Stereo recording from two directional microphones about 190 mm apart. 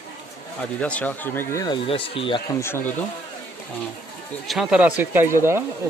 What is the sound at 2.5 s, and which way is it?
Speech, 15° left (ahead or behind).